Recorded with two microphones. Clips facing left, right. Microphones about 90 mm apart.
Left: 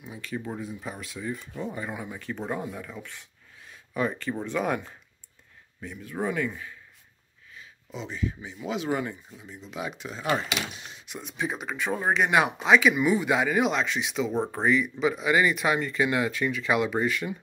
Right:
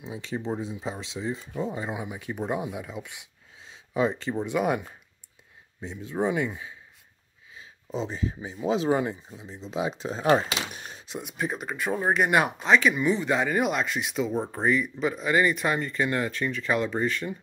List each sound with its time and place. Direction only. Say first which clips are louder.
0.0 s speech: right 2 dB; 25° right (ahead or behind); by 4.9 s 10° right (ahead or behind)
5.8 s speech: right 3 dB; 25° right (ahead or behind)
7.5 s speech: right 7 dB; 35° right (ahead or behind)
11.3 s speech: even; centre (ahead or behind)